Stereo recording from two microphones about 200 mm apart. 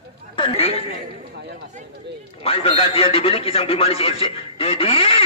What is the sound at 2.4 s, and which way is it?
A man's voice, 30° left (ahead or behind).